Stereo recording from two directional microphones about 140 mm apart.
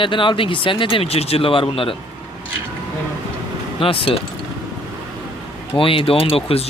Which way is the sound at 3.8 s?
40° left (ahead or behind).